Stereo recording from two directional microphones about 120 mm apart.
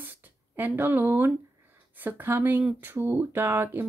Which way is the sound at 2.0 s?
20° right (ahead or behind).